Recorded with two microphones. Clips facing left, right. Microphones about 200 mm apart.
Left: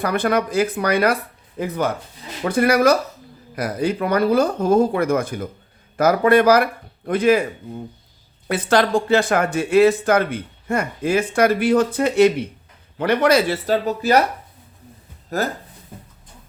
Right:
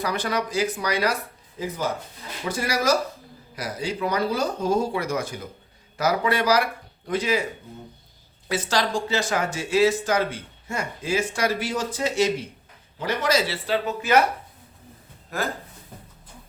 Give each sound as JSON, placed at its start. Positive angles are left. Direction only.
{"t": 0.0, "sound": "speech", "side_deg": 55}
{"t": 8.4, "sound": "speech", "side_deg": 55}
{"t": 13.7, "sound": "speech", "side_deg": 35}
{"t": 15.3, "sound": "speech", "side_deg": 40}